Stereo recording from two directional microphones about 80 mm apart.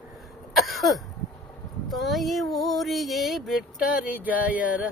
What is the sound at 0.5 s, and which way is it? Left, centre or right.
Cough, centre.